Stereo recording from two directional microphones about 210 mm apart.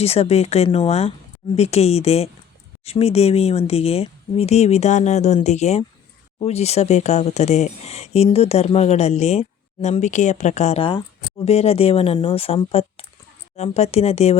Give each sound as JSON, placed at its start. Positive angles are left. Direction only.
{"t": 0.0, "sound": "speech", "side_deg": 30}